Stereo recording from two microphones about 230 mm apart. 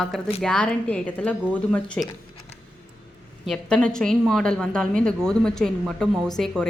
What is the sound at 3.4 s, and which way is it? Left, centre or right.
A woman's voice, centre.